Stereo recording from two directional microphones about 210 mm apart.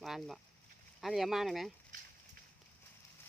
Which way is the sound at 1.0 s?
Centre (ahead or behind).